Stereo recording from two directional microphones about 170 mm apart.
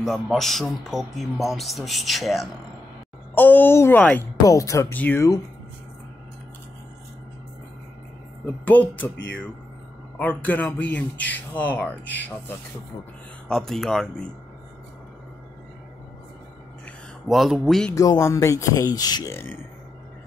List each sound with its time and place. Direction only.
0.0 s a man's voice: centre (ahead or behind)
3.3 s speech: 10° left (ahead or behind)
8.6 s speech: 10° left (ahead or behind)
10.1 s speech: 10° left (ahead or behind)
13.5 s a man's voice: centre (ahead or behind)
16.8 s speech: centre (ahead or behind)
17.9 s speech: 20° left (ahead or behind)